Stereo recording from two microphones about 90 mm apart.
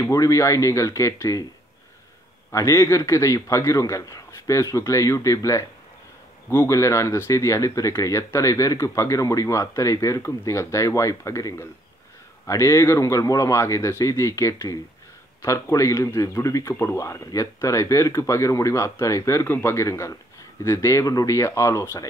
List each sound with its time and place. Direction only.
0.0 s speech: 35° left (ahead or behind)
2.5 s speech: 35° left (ahead or behind)